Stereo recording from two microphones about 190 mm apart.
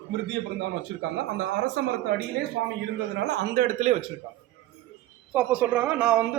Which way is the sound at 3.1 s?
60° right (ahead or behind).